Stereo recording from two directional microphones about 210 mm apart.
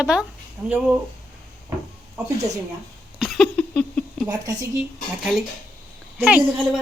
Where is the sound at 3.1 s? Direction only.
Centre (ahead or behind).